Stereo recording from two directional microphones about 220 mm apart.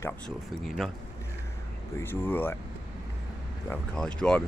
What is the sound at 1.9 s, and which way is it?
Speech, 10° left (ahead or behind).